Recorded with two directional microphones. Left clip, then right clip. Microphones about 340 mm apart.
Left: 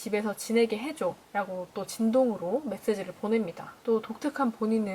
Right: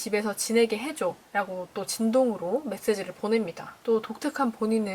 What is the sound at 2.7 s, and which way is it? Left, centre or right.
A woman's voice, centre.